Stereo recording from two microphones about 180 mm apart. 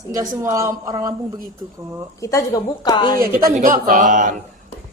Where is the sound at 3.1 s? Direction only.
15° right (ahead or behind).